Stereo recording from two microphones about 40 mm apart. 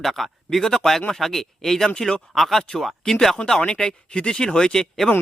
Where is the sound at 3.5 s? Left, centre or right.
Left.